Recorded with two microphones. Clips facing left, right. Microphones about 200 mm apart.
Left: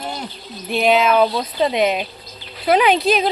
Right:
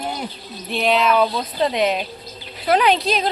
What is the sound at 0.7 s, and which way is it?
Speech, centre (ahead or behind).